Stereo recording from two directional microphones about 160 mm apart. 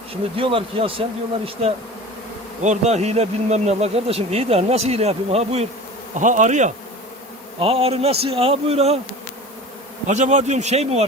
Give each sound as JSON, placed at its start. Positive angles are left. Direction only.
{"t": 0.1, "sound": "speech", "side_deg": -35}
{"t": 6.1, "sound": "speech", "side_deg": -50}
{"t": 7.6, "sound": "speech", "side_deg": -40}
{"t": 10.1, "sound": "speech", "side_deg": -50}